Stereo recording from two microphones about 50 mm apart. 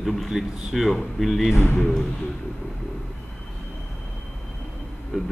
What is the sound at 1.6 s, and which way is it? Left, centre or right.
Speech, centre.